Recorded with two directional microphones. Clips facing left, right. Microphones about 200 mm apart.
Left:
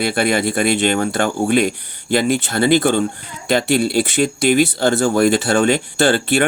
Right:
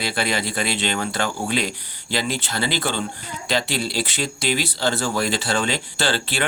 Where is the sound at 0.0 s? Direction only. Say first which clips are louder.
Left 7 dB; 50° left (ahead or behind).